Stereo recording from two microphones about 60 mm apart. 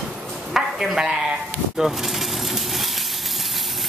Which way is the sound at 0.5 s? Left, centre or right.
Centre.